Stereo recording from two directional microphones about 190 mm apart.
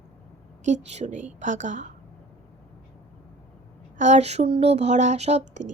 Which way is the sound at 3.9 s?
40° right (ahead or behind).